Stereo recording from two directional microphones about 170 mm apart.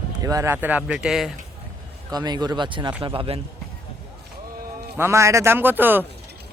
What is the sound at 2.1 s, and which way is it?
A man's voice, 25° right (ahead or behind).